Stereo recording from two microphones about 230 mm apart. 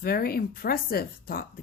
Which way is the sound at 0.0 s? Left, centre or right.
Left.